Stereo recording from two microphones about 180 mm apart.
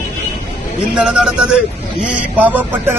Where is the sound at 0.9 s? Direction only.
5° right (ahead or behind).